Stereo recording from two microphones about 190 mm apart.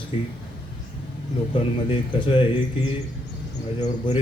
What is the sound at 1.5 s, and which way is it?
Speech, 25° left (ahead or behind).